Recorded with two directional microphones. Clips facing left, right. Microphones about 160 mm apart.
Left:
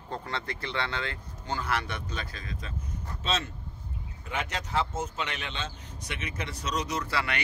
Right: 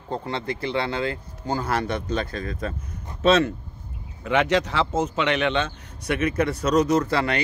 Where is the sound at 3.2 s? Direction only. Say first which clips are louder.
Right 14 dB; 70° right (ahead or behind).